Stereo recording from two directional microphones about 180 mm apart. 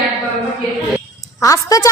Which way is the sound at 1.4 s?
20° left (ahead or behind).